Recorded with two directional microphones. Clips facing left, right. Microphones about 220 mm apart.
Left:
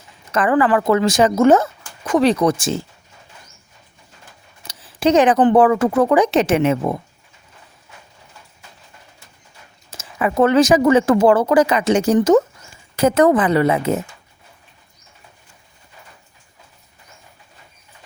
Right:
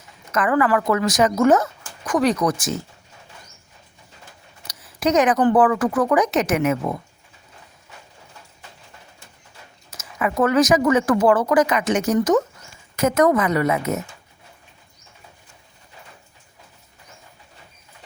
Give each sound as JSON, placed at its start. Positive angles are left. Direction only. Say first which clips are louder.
{"t": 0.3, "sound": "speech", "louder": "left 3 dB", "side_deg": 30}
{"t": 4.6, "sound": "speech", "louder": "left 4 dB", "side_deg": 30}
{"t": 9.9, "sound": "a woman's voice", "louder": "left 3 dB", "side_deg": 30}